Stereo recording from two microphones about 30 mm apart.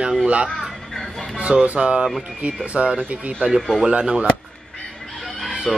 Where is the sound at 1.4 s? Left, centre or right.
Right.